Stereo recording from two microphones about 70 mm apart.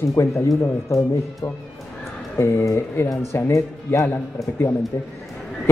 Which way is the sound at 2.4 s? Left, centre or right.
Left.